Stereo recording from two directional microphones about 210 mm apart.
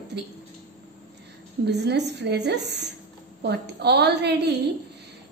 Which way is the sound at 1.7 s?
55° right (ahead or behind).